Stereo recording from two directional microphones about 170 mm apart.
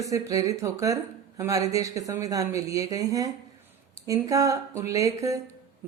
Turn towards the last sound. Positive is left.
turn(degrees=-20)  # may be behind; listen again after turning